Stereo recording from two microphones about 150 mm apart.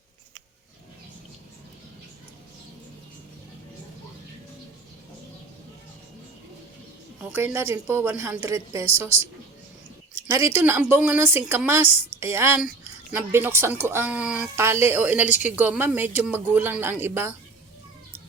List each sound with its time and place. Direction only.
7.2 s a woman's voice: 15° right (ahead or behind)
9.0 s speech: 45° left (ahead or behind)
10.2 s a woman's voice: 20° right (ahead or behind)